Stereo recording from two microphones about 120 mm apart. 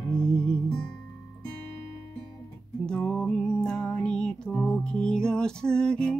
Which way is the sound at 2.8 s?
5° left (ahead or behind).